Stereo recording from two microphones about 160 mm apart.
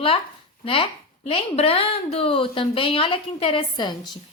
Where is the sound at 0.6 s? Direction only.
35° left (ahead or behind).